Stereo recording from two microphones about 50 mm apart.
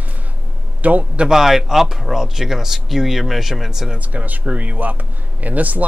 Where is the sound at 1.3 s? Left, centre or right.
Centre.